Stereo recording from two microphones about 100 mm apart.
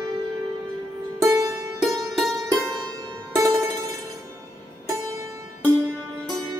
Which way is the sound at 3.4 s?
35° right (ahead or behind).